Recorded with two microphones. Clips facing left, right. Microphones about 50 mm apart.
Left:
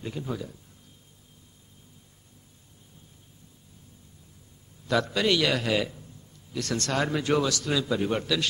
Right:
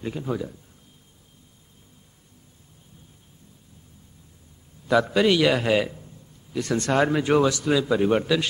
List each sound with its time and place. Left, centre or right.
0.0 s a man's voice: centre
5.0 s speech: centre